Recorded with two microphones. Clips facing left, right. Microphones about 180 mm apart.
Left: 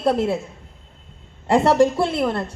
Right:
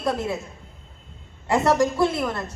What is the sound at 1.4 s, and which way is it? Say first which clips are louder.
A woman's voice: left 4 dB; 30° left (ahead or behind).